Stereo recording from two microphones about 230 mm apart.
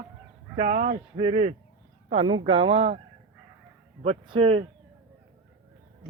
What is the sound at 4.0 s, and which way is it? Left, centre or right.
Speech, right.